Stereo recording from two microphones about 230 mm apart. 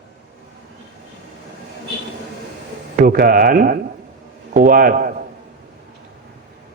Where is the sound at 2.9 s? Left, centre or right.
Right.